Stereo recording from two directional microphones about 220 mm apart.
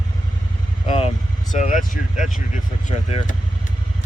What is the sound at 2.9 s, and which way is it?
Speech, 25° left (ahead or behind).